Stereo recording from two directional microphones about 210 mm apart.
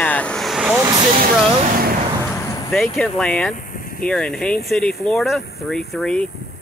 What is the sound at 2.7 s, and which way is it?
Speech, 5° left (ahead or behind).